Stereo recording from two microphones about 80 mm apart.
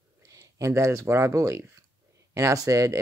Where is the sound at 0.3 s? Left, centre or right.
Right.